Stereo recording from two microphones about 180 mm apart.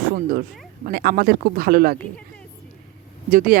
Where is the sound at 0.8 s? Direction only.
55° right (ahead or behind).